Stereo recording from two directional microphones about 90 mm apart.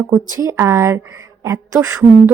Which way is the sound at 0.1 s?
40° right (ahead or behind).